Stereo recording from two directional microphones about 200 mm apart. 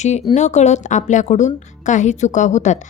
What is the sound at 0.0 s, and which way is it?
A woman's voice, 35° left (ahead or behind).